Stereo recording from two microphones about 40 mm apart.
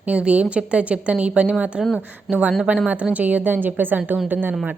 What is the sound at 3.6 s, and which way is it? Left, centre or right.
Speech, right.